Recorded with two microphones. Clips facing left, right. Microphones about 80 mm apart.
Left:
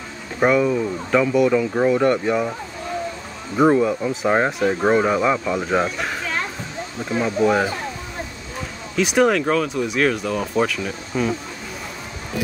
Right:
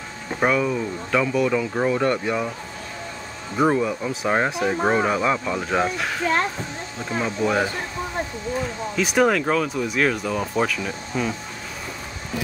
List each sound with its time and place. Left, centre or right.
0.4 s speech: centre
1.6 s speech: centre
2.0 s speech: centre
3.5 s speech: centre
4.5 s speech: centre
4.8 s speech: centre
8.9 s speech: centre